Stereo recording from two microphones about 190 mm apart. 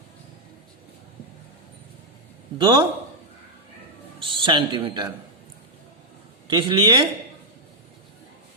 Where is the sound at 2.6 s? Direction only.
25° right (ahead or behind).